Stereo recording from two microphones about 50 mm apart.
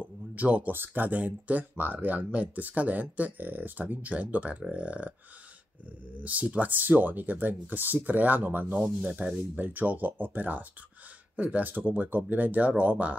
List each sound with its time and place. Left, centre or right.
0.0 s a sound: right
0.7 s speech: right
6.1 s speech: right
9.1 s speech: right